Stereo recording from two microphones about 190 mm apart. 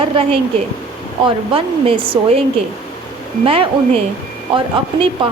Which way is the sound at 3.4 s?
30° right (ahead or behind).